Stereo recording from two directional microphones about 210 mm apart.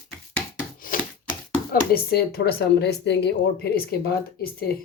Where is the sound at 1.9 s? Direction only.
50° left (ahead or behind).